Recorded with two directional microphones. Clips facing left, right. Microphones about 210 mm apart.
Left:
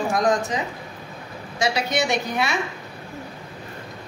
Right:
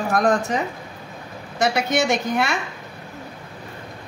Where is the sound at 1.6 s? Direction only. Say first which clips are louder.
Right 3 dB; 50° right (ahead or behind).